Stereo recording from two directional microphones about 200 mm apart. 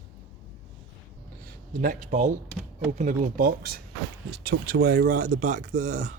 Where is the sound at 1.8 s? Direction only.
40° right (ahead or behind).